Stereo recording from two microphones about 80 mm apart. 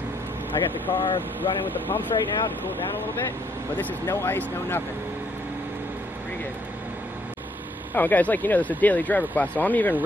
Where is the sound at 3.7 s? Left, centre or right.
Left.